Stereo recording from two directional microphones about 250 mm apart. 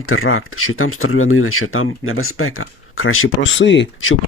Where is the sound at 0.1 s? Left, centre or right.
Left.